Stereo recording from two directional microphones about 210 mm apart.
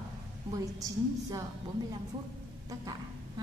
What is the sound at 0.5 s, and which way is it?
Speech, 15° right (ahead or behind).